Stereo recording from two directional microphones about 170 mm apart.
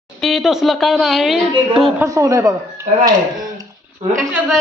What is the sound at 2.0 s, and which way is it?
Speech, 20° right (ahead or behind).